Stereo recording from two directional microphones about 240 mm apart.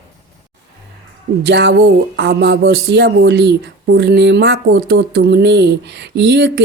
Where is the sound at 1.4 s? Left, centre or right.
Right.